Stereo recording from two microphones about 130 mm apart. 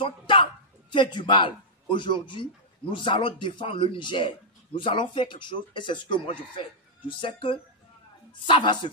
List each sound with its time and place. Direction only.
0.0 s speech: 40° left (ahead or behind)